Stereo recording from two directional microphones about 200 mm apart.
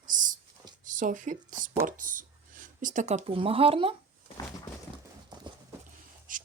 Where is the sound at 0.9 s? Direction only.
40° right (ahead or behind).